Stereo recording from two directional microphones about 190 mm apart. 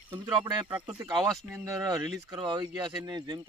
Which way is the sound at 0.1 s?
25° right (ahead or behind).